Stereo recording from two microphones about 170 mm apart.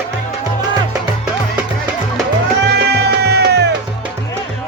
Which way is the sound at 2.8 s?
75° right (ahead or behind).